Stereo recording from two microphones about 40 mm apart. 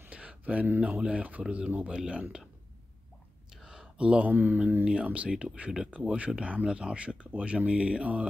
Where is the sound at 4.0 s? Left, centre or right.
Right.